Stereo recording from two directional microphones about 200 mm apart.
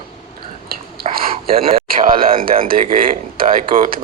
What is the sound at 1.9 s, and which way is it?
Speech, 45° right (ahead or behind).